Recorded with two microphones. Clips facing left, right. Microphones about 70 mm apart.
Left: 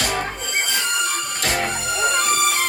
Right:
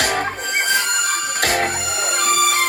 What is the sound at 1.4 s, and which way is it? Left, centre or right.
Music, right.